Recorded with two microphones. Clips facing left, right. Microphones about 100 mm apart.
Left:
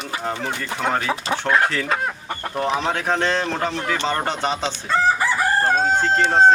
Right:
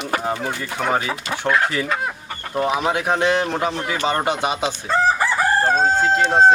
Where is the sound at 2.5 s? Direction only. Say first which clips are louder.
Right 3 dB; 10° right (ahead or behind).